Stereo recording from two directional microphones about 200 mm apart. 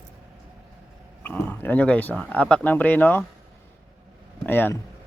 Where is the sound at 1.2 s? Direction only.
10° left (ahead or behind).